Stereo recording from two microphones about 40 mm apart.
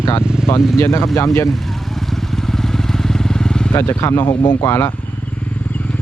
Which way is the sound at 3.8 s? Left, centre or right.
Left.